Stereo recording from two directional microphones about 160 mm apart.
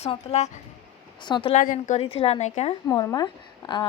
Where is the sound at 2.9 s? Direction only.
25° left (ahead or behind).